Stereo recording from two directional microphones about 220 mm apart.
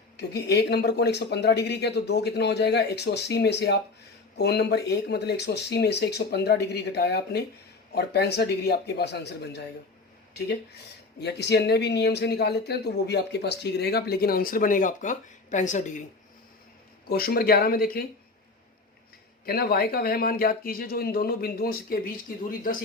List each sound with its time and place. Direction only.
0.2 s speech: 50° left (ahead or behind)
11.2 s speech: 50° left (ahead or behind); by 16.0 s 35° left (ahead or behind)
17.1 s speech: 40° left (ahead or behind)
19.5 s speech: 45° left (ahead or behind)